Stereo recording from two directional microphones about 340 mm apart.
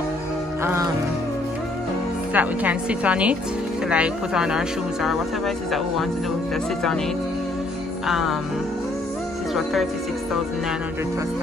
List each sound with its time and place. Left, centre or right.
2.3 s speech: centre
8.1 s speech: centre